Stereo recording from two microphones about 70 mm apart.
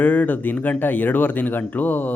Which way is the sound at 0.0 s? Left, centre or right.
Left.